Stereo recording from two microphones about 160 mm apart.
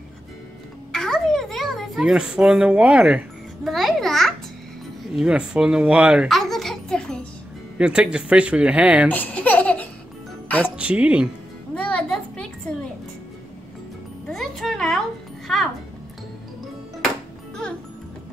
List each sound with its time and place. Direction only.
0.9 s a sound: 5° left (ahead or behind)
5.1 s a child's voice: 5° right (ahead or behind)
7.7 s speech: 5° right (ahead or behind)
9.1 s baby laughter: 10° left (ahead or behind)
10.8 s speech: 5° right (ahead or behind)
11.7 s music: 5° left (ahead or behind)
14.2 s music: centre (ahead or behind)